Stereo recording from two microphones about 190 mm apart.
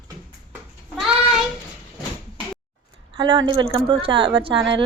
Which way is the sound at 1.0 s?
Centre (ahead or behind).